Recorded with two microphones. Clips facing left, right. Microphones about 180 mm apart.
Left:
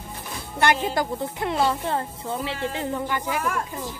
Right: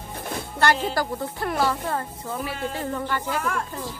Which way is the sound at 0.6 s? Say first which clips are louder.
Left 1 dB; 15° left (ahead or behind).